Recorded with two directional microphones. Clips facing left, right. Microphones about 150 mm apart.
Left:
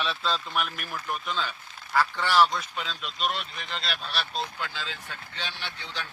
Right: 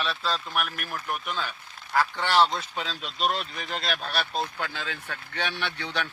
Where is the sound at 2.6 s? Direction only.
35° right (ahead or behind).